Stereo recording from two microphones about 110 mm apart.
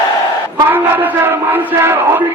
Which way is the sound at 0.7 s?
15° right (ahead or behind).